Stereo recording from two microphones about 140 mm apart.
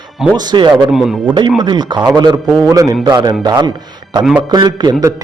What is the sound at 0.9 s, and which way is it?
Speech, 5° right (ahead or behind).